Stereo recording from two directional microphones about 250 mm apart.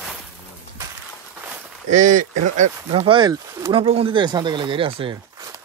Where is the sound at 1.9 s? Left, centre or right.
Right.